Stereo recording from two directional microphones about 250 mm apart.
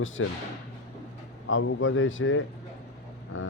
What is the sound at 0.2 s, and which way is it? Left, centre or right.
Speech, left.